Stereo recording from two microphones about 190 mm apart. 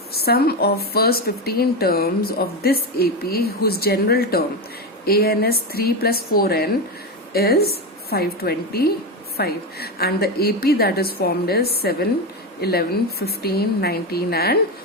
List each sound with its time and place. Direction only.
0.1 s a woman's voice: 55° left (ahead or behind)